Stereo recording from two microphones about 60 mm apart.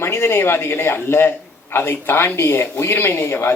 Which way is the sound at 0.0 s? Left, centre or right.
Left.